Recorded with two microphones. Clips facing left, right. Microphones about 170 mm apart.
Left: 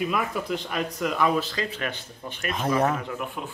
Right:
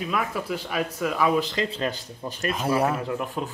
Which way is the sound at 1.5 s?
25° right (ahead or behind).